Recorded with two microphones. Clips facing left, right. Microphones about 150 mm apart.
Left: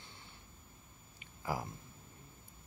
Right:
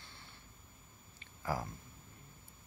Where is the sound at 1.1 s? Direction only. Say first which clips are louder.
Right 1 dB; 15° left (ahead or behind).